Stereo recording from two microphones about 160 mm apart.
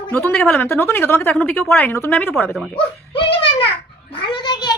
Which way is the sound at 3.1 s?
35° left (ahead or behind).